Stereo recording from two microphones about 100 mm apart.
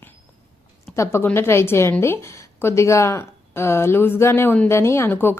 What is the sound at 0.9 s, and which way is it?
A woman's voice, 25° left (ahead or behind).